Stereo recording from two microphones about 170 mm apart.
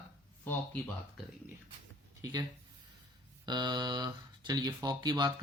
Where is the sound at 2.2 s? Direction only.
25° right (ahead or behind).